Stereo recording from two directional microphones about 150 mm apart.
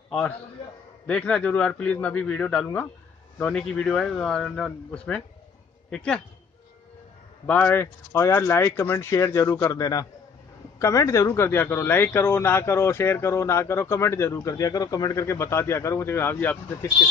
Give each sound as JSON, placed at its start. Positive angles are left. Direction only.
{"t": 1.0, "sound": "a man's voice", "side_deg": 5}
{"t": 7.4, "sound": "a man's voice", "side_deg": 10}